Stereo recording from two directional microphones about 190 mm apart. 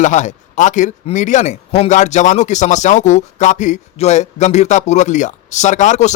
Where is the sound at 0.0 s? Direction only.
40° left (ahead or behind).